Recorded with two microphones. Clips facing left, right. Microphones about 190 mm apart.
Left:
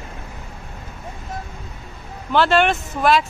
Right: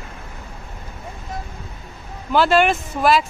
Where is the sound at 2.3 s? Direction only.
5° right (ahead or behind).